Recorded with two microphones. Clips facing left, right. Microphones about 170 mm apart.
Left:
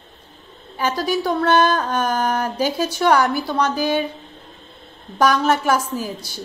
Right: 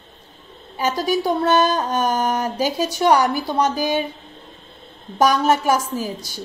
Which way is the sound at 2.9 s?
15° right (ahead or behind).